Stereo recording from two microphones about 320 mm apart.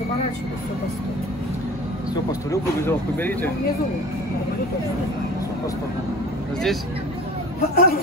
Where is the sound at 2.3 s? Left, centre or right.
Centre.